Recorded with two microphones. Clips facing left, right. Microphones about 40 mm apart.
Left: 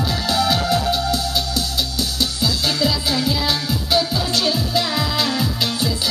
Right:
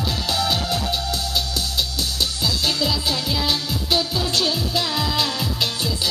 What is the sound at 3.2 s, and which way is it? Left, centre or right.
Music, right.